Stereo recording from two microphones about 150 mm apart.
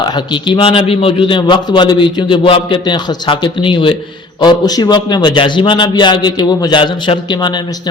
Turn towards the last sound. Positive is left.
turn(degrees=30)  # may be behind; listen again after turning